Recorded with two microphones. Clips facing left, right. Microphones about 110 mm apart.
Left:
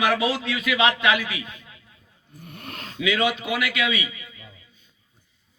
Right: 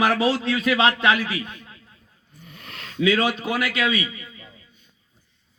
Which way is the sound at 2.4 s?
50° left (ahead or behind).